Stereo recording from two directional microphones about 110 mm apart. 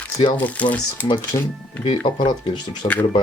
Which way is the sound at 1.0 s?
45° left (ahead or behind).